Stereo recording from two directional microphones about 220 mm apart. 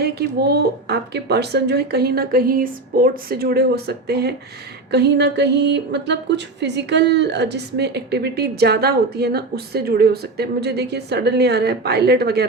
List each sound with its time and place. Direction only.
0.0 s speech: 45° right (ahead or behind)